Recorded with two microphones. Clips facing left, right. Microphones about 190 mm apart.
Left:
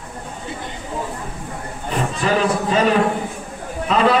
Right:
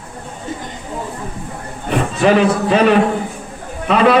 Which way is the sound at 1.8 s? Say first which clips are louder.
Right 7 dB; 70° right (ahead or behind).